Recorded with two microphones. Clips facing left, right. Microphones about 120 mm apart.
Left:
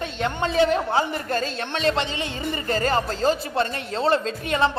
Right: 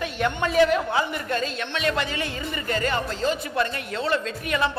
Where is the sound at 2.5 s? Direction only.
35° left (ahead or behind).